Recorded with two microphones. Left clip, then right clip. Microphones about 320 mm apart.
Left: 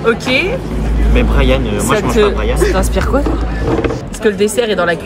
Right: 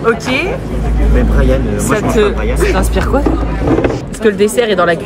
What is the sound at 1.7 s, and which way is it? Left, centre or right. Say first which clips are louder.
Speech: right 1 dB; centre.